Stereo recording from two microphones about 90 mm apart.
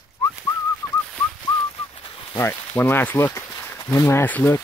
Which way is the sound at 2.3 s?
25° left (ahead or behind).